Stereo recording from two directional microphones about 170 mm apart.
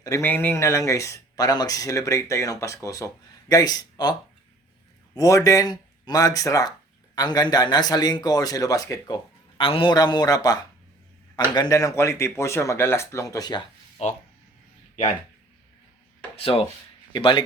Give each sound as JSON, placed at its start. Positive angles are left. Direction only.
{"t": 0.0, "sound": "speech", "side_deg": 15}
{"t": 5.1, "sound": "speech", "side_deg": 20}
{"t": 14.0, "sound": "speech", "side_deg": 40}
{"t": 16.3, "sound": "speech", "side_deg": 35}